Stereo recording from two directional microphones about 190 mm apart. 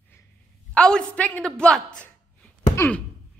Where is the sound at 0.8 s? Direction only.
5° left (ahead or behind).